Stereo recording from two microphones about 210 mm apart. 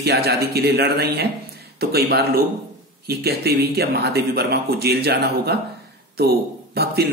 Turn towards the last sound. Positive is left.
turn(degrees=-50)  # may be behind; listen again after turning